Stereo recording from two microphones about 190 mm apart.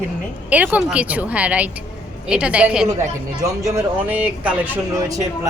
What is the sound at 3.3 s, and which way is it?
Speech, 15° right (ahead or behind).